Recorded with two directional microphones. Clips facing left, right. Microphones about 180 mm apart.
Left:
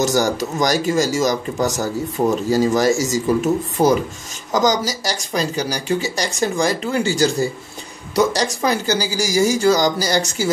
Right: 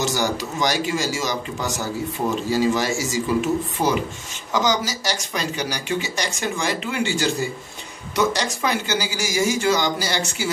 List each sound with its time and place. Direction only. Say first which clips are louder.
0.0 s a man's voice: left 5 dB; 45° left (ahead or behind)